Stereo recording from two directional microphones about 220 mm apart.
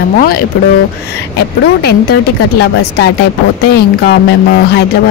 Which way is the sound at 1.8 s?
45° left (ahead or behind).